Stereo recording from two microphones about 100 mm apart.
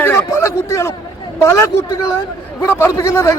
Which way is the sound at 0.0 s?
30° left (ahead or behind).